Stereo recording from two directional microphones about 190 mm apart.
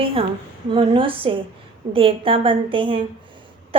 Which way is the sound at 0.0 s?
30° right (ahead or behind).